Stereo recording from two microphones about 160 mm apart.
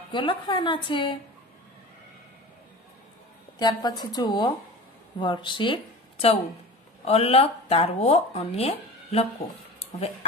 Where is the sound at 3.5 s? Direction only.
25° left (ahead or behind).